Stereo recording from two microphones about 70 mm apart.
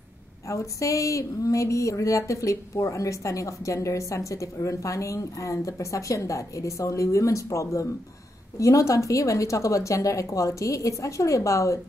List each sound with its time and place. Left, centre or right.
0.5 s speech: left